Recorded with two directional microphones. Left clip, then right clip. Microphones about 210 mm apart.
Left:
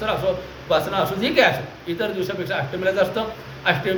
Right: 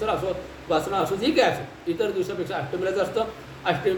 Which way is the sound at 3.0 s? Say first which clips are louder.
Left 4 dB; 15° right (ahead or behind).